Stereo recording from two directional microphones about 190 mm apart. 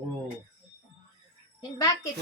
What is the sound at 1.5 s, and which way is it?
Speech, 20° left (ahead or behind).